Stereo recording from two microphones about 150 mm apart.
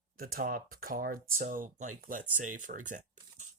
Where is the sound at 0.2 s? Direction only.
75° right (ahead or behind).